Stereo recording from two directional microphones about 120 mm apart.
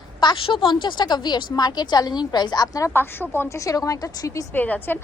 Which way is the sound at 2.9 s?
20° left (ahead or behind).